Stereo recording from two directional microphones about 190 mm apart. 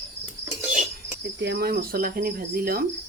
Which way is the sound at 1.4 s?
55° right (ahead or behind).